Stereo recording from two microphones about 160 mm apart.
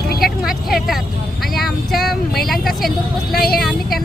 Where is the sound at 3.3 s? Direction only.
70° left (ahead or behind).